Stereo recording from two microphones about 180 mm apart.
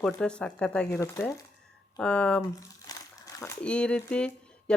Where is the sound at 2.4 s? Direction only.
20° left (ahead or behind).